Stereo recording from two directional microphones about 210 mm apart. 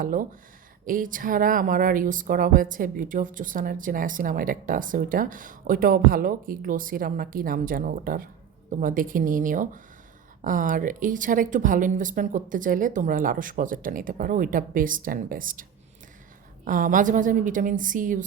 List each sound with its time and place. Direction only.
0.0 s speech: 40° right (ahead or behind)
16.6 s speech: 40° right (ahead or behind)